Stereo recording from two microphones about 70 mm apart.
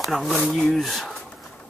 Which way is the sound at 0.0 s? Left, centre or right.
Centre.